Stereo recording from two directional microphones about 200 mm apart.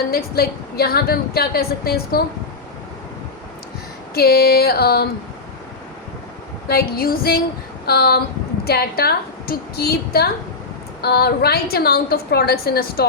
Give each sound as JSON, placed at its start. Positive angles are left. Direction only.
{"t": 0.1, "sound": "a woman's voice", "side_deg": 50}
{"t": 4.1, "sound": "a woman's voice", "side_deg": 50}
{"t": 6.7, "sound": "a woman's voice", "side_deg": 50}